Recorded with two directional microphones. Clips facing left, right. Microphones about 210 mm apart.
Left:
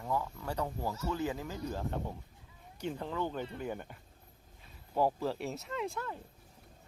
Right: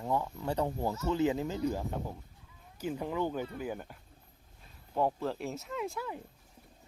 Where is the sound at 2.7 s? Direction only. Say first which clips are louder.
Right 3 dB; 10° right (ahead or behind).